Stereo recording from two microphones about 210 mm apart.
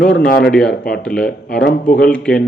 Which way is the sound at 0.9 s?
5° left (ahead or behind).